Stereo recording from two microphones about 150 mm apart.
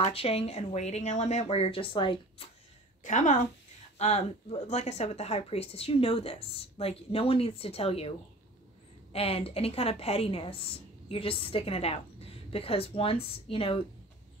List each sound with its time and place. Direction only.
0.0 s speech: 40° left (ahead or behind)
3.0 s a woman's voice: 55° left (ahead or behind)
9.1 s a woman's voice: 40° left (ahead or behind)